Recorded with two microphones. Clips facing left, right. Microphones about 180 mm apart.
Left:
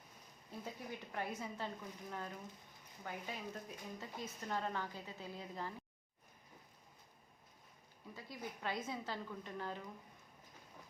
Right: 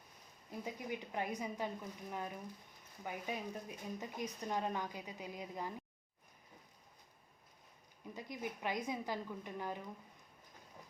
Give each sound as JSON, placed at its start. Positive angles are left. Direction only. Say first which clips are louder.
{"t": 0.6, "sound": "speech", "louder": "right 5 dB", "side_deg": -15}
{"t": 8.1, "sound": "speech", "louder": "right 4 dB", "side_deg": -20}